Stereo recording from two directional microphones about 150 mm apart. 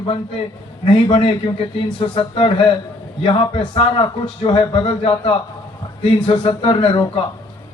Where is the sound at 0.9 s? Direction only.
35° left (ahead or behind).